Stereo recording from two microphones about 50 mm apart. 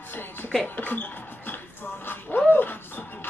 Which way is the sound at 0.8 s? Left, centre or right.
Left.